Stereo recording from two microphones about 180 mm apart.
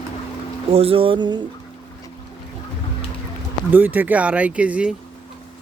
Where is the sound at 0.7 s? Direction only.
30° right (ahead or behind).